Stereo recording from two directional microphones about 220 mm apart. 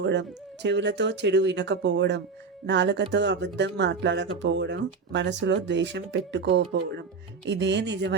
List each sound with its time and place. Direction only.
0.0 s speech: 55° right (ahead or behind)